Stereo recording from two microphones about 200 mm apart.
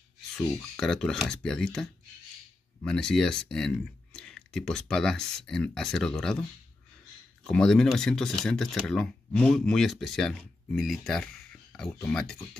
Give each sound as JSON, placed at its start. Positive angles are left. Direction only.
{"t": 0.7, "sound": "speech", "side_deg": 0}
{"t": 7.4, "sound": "speech", "side_deg": 5}